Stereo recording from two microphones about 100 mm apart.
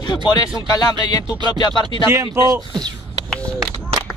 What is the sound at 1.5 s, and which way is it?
Speech, 45° left (ahead or behind).